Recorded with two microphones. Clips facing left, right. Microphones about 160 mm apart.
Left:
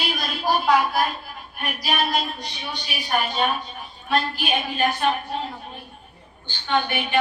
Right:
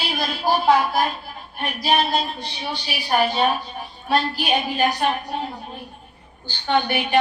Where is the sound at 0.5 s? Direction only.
30° right (ahead or behind).